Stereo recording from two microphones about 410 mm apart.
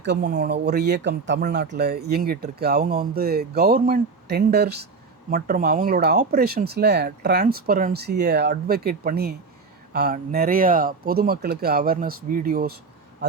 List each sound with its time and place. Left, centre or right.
0.0 s speech: right